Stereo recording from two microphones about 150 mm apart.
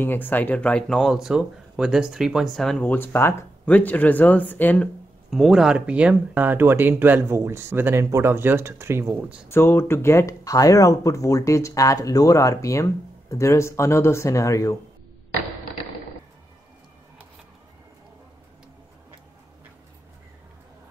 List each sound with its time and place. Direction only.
0.0 s speech: 10° left (ahead or behind)
5.3 s speech: 5° right (ahead or behind)
9.5 s speech: 15° left (ahead or behind)